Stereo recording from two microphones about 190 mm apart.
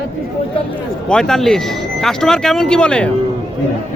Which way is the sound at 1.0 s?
5° left (ahead or behind).